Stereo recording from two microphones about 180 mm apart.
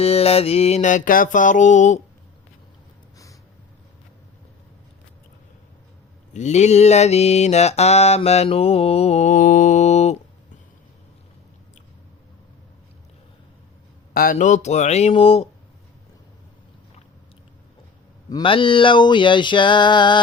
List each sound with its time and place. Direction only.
0.0 s mantra: 35° left (ahead or behind)
6.3 s mantra: 40° left (ahead or behind)
14.1 s mantra: 55° left (ahead or behind); by 15.4 s 30° left (ahead or behind)
18.3 s a sound: 25° left (ahead or behind)